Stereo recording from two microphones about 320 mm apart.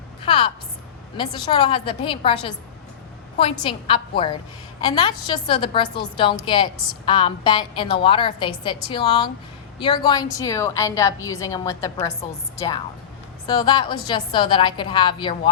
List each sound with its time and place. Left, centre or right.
0.3 s a woman's voice: centre
3.6 s a woman's voice: centre